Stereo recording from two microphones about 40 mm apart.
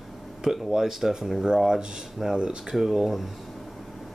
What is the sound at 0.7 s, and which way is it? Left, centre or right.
Speech, centre.